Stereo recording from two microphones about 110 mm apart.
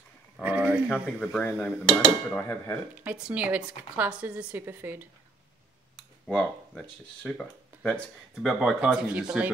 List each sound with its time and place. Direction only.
0.4 s speech: 15° right (ahead or behind)
1.3 s speech: 15° left (ahead or behind)
2.4 s speech: 25° left (ahead or behind)
2.9 s speech: 15° right (ahead or behind)
6.2 s speech: 10° left (ahead or behind)
8.5 s speech: 5° right (ahead or behind)